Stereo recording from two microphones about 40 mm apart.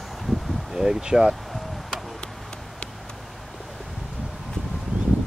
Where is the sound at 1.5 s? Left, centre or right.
Centre.